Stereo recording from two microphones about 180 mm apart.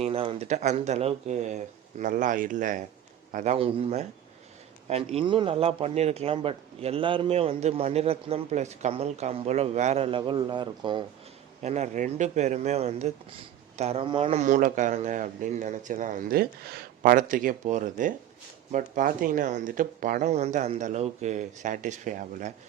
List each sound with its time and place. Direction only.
0.0 s speech: 30° right (ahead or behind)
11.6 s speech: 40° right (ahead or behind)
14.4 s speech: 45° right (ahead or behind)